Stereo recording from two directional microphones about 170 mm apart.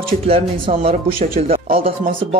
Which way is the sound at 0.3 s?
35° right (ahead or behind).